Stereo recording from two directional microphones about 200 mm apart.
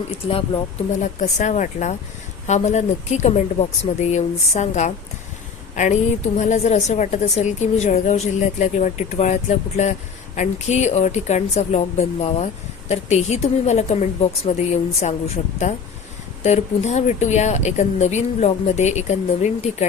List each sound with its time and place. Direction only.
0.1 s a woman's voice: 25° left (ahead or behind)
16.4 s a woman's voice: 35° left (ahead or behind)